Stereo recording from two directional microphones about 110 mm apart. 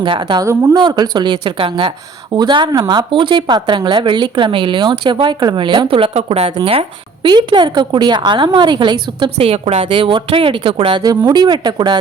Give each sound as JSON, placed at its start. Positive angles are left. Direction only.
{"t": 0.0, "sound": "speech", "side_deg": -50}
{"t": 0.3, "sound": "speech", "side_deg": -35}
{"t": 2.3, "sound": "speech", "side_deg": -45}
{"t": 6.7, "sound": "speech", "side_deg": -50}
{"t": 9.4, "sound": "speech", "side_deg": -65}
{"t": 10.9, "sound": "speech", "side_deg": -35}